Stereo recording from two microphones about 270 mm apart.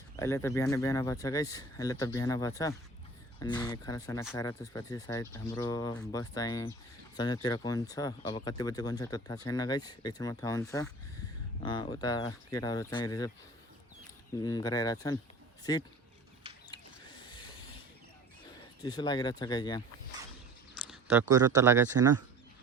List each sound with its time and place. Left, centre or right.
0.2 s speech: centre
14.4 s speech: centre
16.7 s a sound: centre
18.8 s speech: centre
20.8 s speech: centre